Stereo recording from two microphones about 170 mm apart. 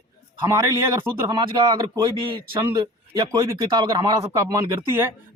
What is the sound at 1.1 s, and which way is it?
A man's voice, 15° right (ahead or behind).